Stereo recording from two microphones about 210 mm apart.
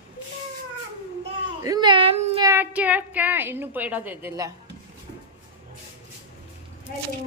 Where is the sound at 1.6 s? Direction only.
20° right (ahead or behind).